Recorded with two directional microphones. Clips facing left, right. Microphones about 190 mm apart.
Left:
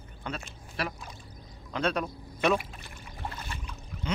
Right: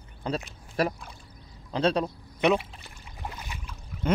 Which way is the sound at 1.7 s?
30° right (ahead or behind).